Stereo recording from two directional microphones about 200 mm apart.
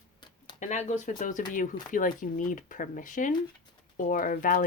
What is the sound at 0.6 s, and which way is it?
Speech, 35° left (ahead or behind).